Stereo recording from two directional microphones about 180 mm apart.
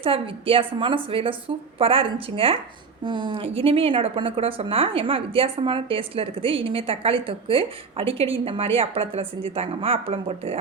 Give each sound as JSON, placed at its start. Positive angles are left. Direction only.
{"t": 0.0, "sound": "a woman's voice", "side_deg": -30}